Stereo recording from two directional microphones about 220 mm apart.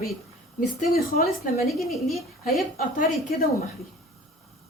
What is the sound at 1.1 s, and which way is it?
Speech, 45° left (ahead or behind).